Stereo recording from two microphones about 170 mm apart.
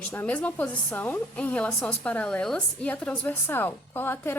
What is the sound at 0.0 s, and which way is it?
A woman's voice, 10° left (ahead or behind).